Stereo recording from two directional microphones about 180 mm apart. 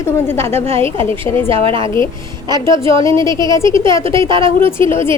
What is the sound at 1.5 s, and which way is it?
Speech, 30° right (ahead or behind).